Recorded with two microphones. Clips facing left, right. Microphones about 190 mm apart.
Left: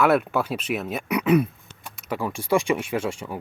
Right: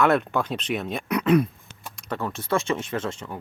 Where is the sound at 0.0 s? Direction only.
5° left (ahead or behind).